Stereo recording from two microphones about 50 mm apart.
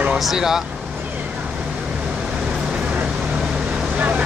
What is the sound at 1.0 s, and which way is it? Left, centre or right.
Vehicle, right.